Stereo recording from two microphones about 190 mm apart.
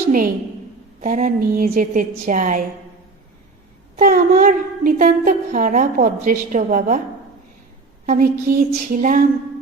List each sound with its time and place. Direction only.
1.0 s a woman's voice: 45° right (ahead or behind)
3.9 s a woman's voice: 50° right (ahead or behind)
8.0 s a woman's voice: 45° right (ahead or behind)